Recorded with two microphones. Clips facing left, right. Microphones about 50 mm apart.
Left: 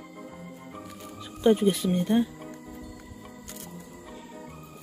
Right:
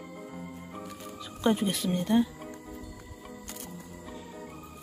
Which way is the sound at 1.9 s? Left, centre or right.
Left.